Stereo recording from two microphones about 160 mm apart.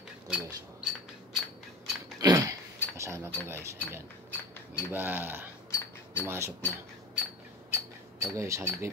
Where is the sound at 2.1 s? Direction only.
20° right (ahead or behind).